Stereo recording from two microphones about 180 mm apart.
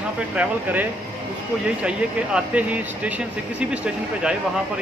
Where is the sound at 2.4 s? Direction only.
5° right (ahead or behind).